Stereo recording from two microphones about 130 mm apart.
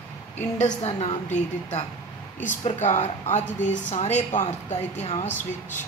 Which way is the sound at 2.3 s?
70° left (ahead or behind).